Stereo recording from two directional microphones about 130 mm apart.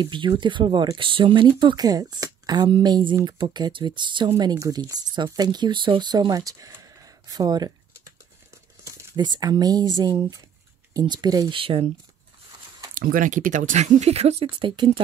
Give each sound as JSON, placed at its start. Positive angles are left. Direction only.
{"t": 0.0, "sound": "speech", "side_deg": -35}
{"t": 9.1, "sound": "speech", "side_deg": -30}
{"t": 11.6, "sound": "speech", "side_deg": -45}
{"t": 12.9, "sound": "speech", "side_deg": -90}